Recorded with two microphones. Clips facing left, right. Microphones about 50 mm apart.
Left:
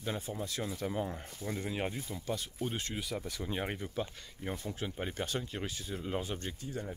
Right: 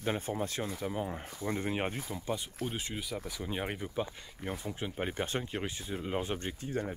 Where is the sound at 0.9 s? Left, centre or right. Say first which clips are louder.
Left 1 dB; centre.